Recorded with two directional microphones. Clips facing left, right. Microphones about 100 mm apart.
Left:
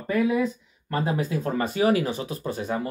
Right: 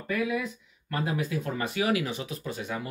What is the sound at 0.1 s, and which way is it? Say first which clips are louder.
Speech: left 6 dB; 30° left (ahead or behind).